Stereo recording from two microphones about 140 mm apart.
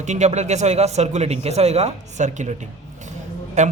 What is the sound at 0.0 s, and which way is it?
A man's voice, 55° right (ahead or behind).